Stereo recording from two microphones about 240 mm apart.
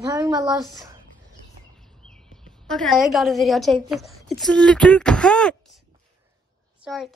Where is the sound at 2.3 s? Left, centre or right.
Centre.